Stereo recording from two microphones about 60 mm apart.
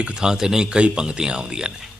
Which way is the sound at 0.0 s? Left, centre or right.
Centre.